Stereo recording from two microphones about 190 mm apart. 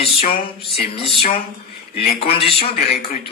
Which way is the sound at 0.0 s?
30° left (ahead or behind).